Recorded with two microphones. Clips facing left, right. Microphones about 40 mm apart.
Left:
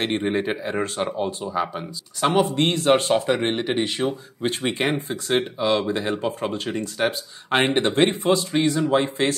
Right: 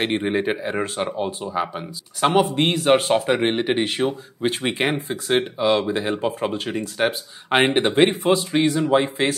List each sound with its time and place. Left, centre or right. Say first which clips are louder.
0.0 s speech: right 1 dB; centre